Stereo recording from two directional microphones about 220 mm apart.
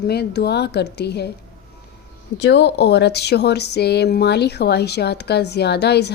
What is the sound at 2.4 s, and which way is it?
Speech, 50° left (ahead or behind).